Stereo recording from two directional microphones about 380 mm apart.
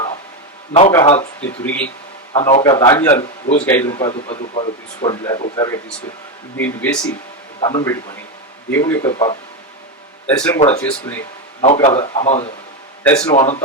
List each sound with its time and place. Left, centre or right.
0.7 s speech: centre
2.3 s speech: centre
13.1 s speech: centre
13.3 s speech: centre